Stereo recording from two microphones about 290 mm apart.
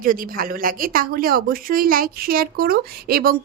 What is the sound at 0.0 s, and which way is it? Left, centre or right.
Speech, right.